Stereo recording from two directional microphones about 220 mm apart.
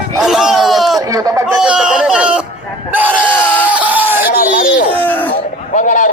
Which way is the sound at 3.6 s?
5° right (ahead or behind).